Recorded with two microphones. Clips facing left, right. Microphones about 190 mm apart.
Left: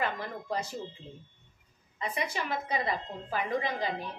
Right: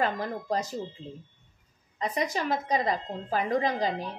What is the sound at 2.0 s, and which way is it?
A woman's voice, 40° right (ahead or behind).